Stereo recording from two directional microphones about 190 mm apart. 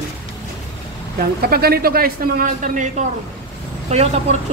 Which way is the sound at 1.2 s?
55° right (ahead or behind).